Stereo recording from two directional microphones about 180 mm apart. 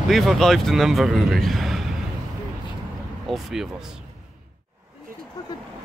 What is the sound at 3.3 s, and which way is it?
Speech, centre (ahead or behind).